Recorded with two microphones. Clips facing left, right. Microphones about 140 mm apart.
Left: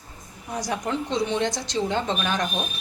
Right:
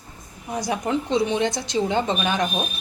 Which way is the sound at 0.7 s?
5° right (ahead or behind).